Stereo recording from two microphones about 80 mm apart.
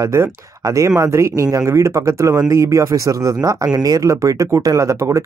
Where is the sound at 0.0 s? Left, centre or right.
Right.